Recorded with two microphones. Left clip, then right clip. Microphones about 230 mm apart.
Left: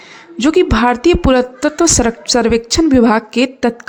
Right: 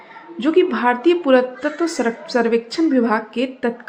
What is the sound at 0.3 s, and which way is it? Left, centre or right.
A woman's voice, left.